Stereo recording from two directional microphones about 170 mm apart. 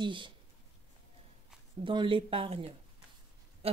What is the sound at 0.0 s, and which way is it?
Speech, 30° right (ahead or behind).